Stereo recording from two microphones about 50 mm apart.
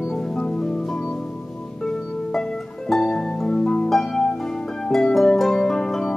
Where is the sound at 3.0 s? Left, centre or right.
Centre.